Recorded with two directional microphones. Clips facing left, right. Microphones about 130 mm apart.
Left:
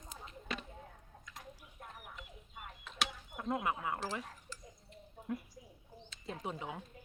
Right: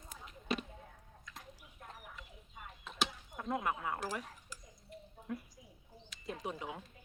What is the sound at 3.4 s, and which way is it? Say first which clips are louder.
Speech: left 1 dB; 20° left (ahead or behind).